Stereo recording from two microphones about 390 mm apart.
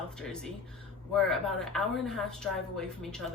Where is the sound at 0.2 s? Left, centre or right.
Centre.